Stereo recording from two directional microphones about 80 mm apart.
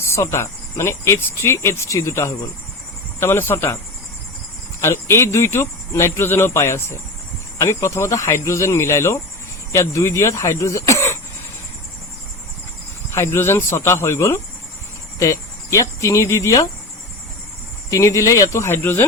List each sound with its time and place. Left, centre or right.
0.0 s speech: left
4.8 s speech: left
13.1 s speech: left
15.2 s cricket: left
17.9 s speech: left